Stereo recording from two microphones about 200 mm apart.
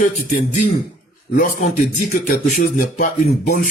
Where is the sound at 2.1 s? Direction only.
35° left (ahead or behind).